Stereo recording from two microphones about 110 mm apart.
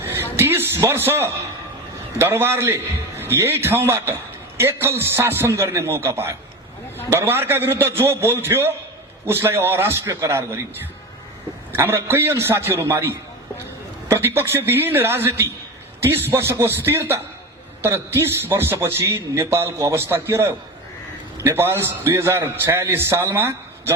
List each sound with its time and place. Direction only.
0.0 s a man's voice: 20° right (ahead or behind)
11.7 s speech: 20° right (ahead or behind)